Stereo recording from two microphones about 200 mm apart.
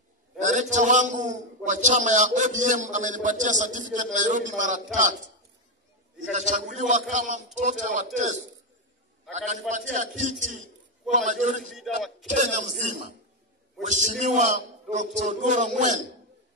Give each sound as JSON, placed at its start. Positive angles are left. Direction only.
{"t": 0.4, "sound": "a man's voice", "side_deg": -40}
{"t": 6.3, "sound": "a man's voice", "side_deg": -40}
{"t": 11.6, "sound": "a man's voice", "side_deg": 0}
{"t": 12.4, "sound": "a man's voice", "side_deg": -40}